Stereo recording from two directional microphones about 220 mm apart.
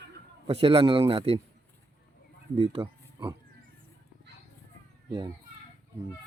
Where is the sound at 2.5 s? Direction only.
25° right (ahead or behind).